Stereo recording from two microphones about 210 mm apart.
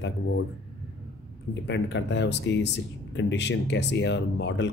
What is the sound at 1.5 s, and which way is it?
Speech, 55° left (ahead or behind).